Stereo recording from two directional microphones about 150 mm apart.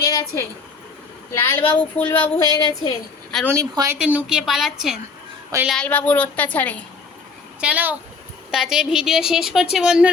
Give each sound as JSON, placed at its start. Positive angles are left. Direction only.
{"t": 0.0, "sound": "a sound", "side_deg": 25}
{"t": 1.3, "sound": "speech", "side_deg": 15}
{"t": 2.5, "sound": "speech", "side_deg": -30}
{"t": 3.9, "sound": "speech", "side_deg": -5}
{"t": 7.6, "sound": "speech", "side_deg": -10}